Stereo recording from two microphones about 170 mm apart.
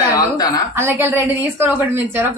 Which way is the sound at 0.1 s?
20° left (ahead or behind).